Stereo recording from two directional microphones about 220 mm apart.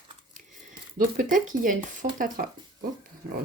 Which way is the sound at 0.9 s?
40° right (ahead or behind).